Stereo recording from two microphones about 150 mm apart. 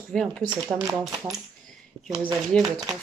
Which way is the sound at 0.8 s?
20° right (ahead or behind).